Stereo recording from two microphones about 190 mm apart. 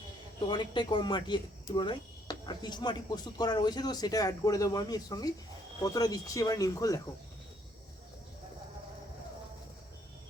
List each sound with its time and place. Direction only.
0.3 s speech: 25° left (ahead or behind)